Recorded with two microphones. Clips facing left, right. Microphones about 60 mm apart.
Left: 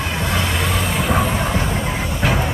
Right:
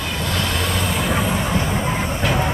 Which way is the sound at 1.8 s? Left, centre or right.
Centre.